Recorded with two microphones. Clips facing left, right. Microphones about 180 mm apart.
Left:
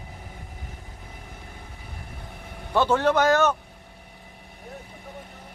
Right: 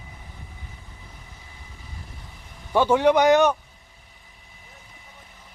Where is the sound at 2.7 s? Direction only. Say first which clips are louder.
Right 3 dB; 10° right (ahead or behind).